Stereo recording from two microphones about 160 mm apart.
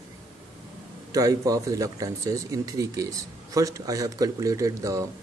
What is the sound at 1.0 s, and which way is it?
Speech, 20° right (ahead or behind).